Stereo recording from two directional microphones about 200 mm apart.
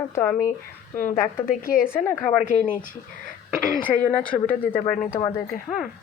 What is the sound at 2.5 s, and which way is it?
Speech, 40° left (ahead or behind).